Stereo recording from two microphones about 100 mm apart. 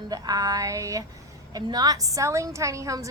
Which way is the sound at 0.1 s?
40° right (ahead or behind).